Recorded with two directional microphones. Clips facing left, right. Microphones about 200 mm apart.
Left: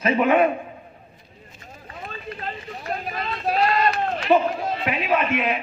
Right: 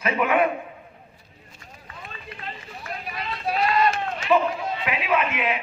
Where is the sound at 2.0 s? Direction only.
40° left (ahead or behind).